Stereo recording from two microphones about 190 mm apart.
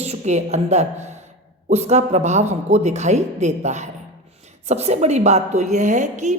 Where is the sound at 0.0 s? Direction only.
35° right (ahead or behind).